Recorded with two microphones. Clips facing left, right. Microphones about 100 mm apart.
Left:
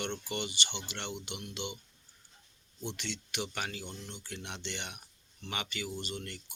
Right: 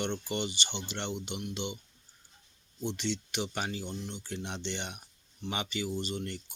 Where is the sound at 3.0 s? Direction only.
20° right (ahead or behind).